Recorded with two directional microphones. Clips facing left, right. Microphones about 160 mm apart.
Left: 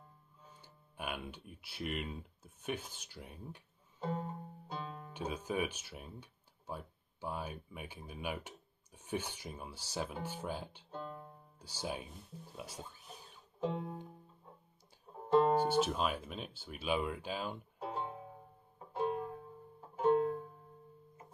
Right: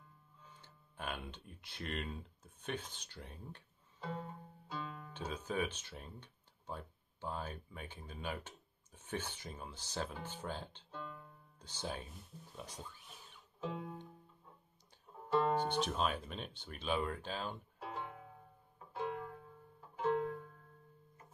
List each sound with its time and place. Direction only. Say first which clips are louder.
0.6 s speech: left 2 dB; 10° left (ahead or behind)
4.0 s music: left 5 dB; 40° left (ahead or behind)
5.1 s speech: left 2 dB; 10° left (ahead or behind)
10.9 s music: left 6 dB; 40° left (ahead or behind)
11.6 s speech: left 2 dB; 10° left (ahead or behind)
13.1 s music: left 5 dB; 35° left (ahead or behind)
15.1 s music: left 5 dB; 30° left (ahead or behind)
15.7 s speech: left 3 dB; 5° left (ahead or behind)
17.8 s music: left 5 dB; 25° left (ahead or behind)